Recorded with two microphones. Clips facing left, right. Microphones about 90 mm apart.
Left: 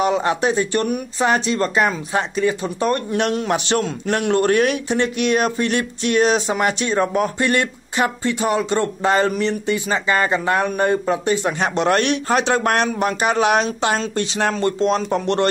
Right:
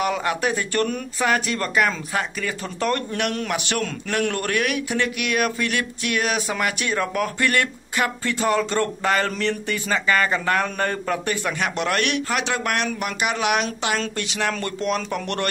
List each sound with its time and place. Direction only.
0.0 s speech: 25° left (ahead or behind)